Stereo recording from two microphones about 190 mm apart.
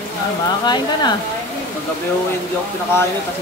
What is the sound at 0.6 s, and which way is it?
Speech, 20° left (ahead or behind).